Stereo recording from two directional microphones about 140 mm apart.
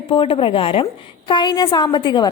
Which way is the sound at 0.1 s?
40° left (ahead or behind).